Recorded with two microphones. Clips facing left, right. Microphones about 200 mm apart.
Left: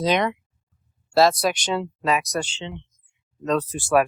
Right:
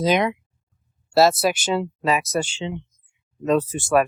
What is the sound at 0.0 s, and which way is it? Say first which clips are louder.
Speech: right 2 dB; 5° right (ahead or behind).